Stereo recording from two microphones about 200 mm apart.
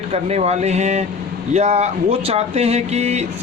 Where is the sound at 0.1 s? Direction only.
35° right (ahead or behind).